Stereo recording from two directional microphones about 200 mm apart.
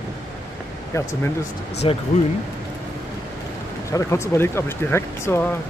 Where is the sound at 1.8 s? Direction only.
25° left (ahead or behind).